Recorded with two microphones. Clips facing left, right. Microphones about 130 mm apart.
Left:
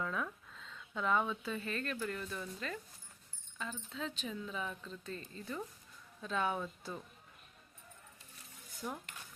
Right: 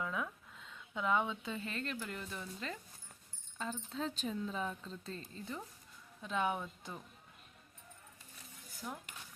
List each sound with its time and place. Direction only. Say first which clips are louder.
0.0 s speech: left 1 dB; 15° right (ahead or behind)
3.6 s speech: right 2 dB; 35° right (ahead or behind); by 7.0 s 15° right (ahead or behind)
8.7 s speech: left 3 dB; centre (ahead or behind)